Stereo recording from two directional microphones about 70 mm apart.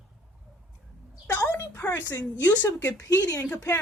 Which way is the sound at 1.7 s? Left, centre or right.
Left.